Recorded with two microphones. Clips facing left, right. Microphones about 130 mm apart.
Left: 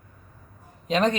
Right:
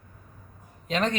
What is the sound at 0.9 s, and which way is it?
Speech, 20° left (ahead or behind).